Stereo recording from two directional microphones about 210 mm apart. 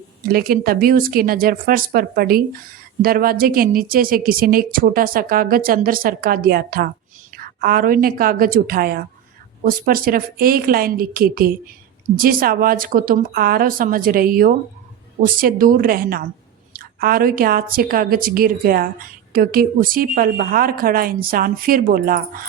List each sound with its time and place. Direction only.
0.3 s a woman's voice: 45° right (ahead or behind)